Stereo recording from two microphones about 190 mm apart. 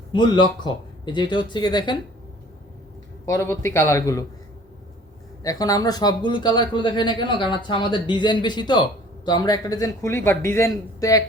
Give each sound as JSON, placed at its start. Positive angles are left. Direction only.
{"t": 0.1, "sound": "speech", "side_deg": 25}
{"t": 3.2, "sound": "a man's voice", "side_deg": 15}
{"t": 5.4, "sound": "speech", "side_deg": 20}